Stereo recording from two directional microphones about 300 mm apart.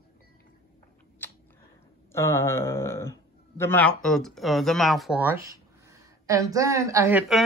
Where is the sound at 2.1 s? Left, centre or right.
Centre.